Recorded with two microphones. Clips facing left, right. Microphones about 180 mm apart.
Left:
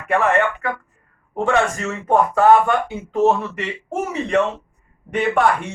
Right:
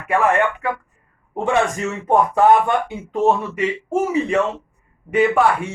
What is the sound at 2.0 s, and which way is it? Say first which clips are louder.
Speech: even; 20° right (ahead or behind).